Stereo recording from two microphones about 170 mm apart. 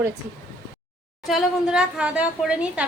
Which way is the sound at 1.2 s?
Centre (ahead or behind).